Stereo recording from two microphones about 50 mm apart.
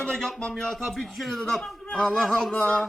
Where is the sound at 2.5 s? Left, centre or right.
Left.